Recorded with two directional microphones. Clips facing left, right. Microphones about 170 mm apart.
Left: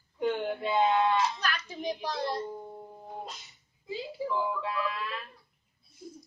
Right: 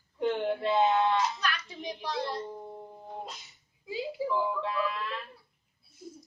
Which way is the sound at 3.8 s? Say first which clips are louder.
Right 2 dB; 10° right (ahead or behind).